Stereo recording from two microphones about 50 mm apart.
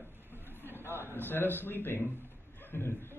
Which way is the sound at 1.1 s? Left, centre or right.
Left.